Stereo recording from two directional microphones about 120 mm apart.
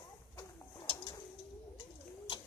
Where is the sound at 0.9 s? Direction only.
40° left (ahead or behind).